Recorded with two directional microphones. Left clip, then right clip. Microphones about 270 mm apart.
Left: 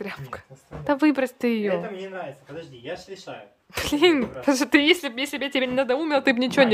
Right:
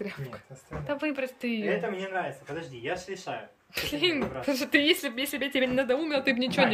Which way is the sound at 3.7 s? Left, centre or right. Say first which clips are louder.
Left 8 dB; centre.